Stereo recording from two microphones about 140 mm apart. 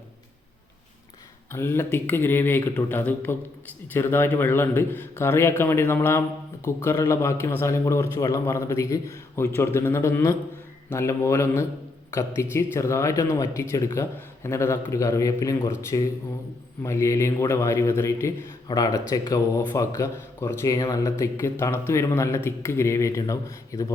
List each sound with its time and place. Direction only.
1.5 s a man's voice: 15° left (ahead or behind)